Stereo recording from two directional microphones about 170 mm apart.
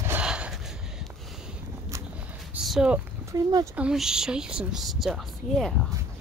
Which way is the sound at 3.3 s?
20° right (ahead or behind).